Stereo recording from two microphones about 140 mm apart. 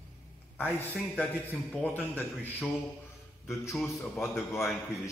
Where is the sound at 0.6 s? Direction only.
15° left (ahead or behind).